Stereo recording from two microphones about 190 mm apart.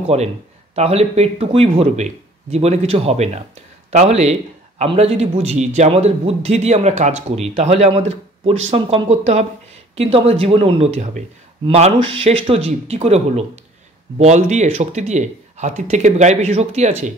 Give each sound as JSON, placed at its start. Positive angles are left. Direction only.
{"t": 0.0, "sound": "a man's voice", "side_deg": -35}